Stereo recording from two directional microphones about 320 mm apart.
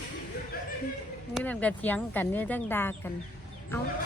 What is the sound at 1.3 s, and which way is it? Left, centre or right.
Speech, centre.